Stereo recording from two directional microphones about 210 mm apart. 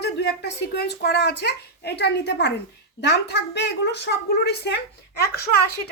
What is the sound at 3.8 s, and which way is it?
Speech, 50° left (ahead or behind).